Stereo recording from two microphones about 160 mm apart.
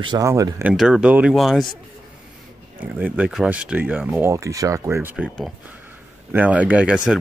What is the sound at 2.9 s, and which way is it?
Speech, 10° right (ahead or behind).